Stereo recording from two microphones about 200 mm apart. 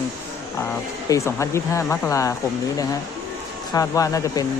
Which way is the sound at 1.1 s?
15° left (ahead or behind).